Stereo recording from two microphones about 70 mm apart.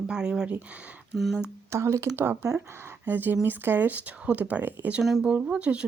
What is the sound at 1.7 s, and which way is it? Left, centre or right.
Speech, right.